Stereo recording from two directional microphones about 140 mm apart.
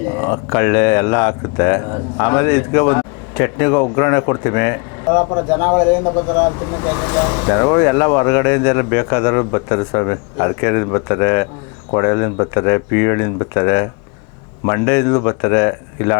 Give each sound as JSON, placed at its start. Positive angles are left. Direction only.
{"t": 0.2, "sound": "speech", "side_deg": 20}